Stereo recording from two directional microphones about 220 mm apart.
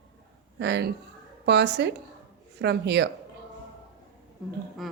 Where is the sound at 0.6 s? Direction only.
50° right (ahead or behind).